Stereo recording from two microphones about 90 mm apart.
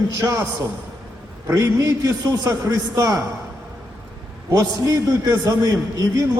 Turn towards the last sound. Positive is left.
turn(degrees=-40)  # may be behind; listen again after turning